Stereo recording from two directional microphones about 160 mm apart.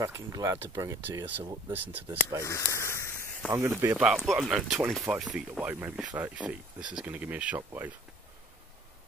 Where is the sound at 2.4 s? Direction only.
20° left (ahead or behind).